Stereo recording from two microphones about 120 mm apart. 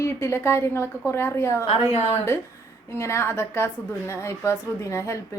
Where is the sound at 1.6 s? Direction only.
55° left (ahead or behind).